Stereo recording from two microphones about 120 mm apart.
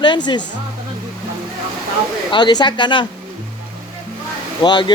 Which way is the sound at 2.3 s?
40° left (ahead or behind).